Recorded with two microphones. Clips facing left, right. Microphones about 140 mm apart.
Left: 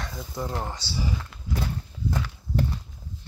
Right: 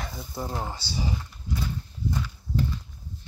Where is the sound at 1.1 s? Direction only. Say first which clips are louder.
Left 1 dB; 90° left.